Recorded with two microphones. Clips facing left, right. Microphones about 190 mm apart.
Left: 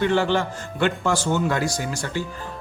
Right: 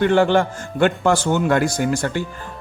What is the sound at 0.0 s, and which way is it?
A man's voice, 55° right (ahead or behind).